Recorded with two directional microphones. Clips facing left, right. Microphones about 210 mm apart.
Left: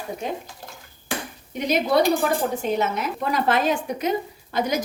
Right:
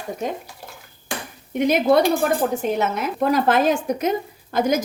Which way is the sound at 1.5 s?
50° right (ahead or behind).